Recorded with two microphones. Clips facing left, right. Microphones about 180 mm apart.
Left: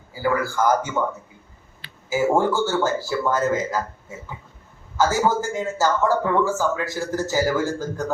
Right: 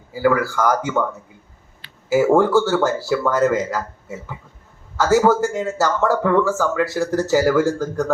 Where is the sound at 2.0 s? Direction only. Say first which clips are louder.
Right 5 dB; 70° right (ahead or behind).